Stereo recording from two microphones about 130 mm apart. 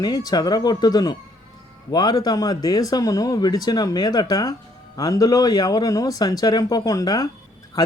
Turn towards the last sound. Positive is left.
turn(degrees=30)  # may be behind; listen again after turning